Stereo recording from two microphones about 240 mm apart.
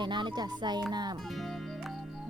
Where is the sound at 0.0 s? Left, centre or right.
Centre.